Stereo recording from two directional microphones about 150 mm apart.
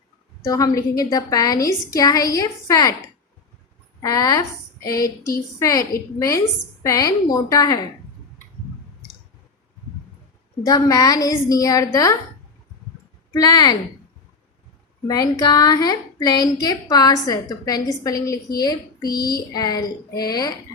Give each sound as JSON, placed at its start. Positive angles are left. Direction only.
{"t": 0.4, "sound": "a woman's voice", "side_deg": 20}
{"t": 4.0, "sound": "a woman's voice", "side_deg": 25}
{"t": 10.7, "sound": "a woman's voice", "side_deg": 25}
{"t": 13.3, "sound": "a woman's voice", "side_deg": 25}
{"t": 15.0, "sound": "a woman's voice", "side_deg": 25}